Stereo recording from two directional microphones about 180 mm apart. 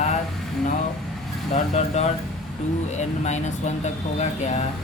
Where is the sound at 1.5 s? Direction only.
40° left (ahead or behind).